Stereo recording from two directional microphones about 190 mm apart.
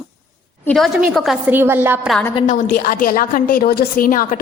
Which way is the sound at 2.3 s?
40° left (ahead or behind).